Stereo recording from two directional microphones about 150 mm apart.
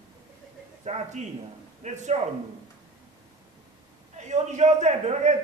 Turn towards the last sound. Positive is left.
turn(degrees=-50)  # may be behind; listen again after turning